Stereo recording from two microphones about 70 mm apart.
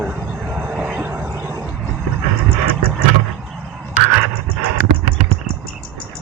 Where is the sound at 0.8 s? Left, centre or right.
Centre.